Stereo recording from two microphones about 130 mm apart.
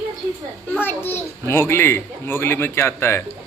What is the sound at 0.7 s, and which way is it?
A child's voice, 15° left (ahead or behind).